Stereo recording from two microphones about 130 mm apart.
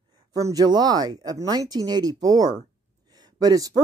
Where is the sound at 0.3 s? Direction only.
25° right (ahead or behind).